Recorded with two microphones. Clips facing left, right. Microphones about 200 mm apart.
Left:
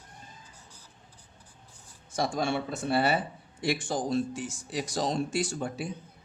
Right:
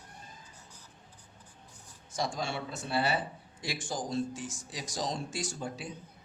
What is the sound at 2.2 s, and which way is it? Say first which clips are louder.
Speech: left 6 dB; 55° left (ahead or behind).